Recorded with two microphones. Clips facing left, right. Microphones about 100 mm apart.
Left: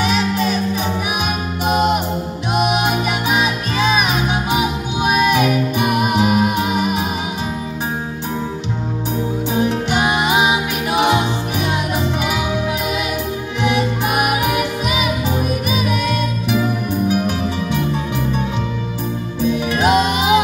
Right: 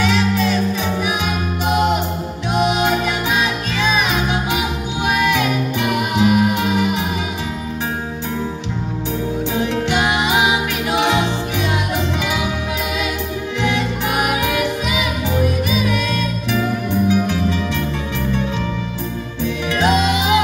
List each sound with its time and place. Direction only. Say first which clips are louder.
0.0 s music: right 1 dB; 15° left (ahead or behind)
2.5 s music: right 1 dB; 15° left (ahead or behind)
9.5 s music: left 2 dB; 15° left (ahead or behind)
13.6 s music: left 3 dB; 15° left (ahead or behind)
19.4 s music: left 2 dB; 15° left (ahead or behind)